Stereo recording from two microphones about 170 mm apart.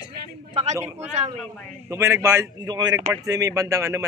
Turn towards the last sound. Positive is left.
turn(degrees=-15)  # may be behind; listen again after turning